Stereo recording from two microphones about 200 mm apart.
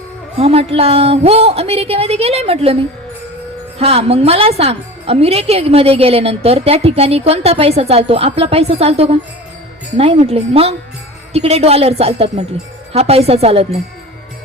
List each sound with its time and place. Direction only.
0.3 s a woman's voice: 30° right (ahead or behind)